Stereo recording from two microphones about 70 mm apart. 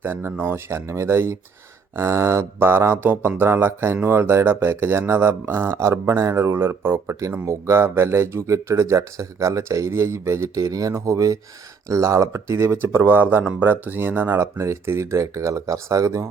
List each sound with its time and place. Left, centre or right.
0.0 s speech: right
7.2 s speech: right
10.6 s speech: right